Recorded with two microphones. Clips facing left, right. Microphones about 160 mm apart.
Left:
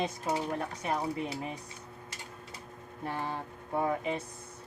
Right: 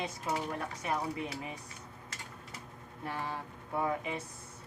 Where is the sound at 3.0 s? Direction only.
20° left (ahead or behind).